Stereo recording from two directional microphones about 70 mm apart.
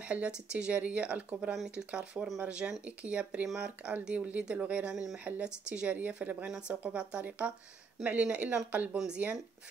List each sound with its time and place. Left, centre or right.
0.0 s speech: centre
1.5 s speech: centre
1.9 s speech: centre
4.9 s speech: centre
5.2 s speech: centre
8.9 s speech: centre